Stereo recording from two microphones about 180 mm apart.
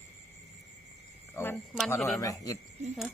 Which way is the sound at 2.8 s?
40° right (ahead or behind).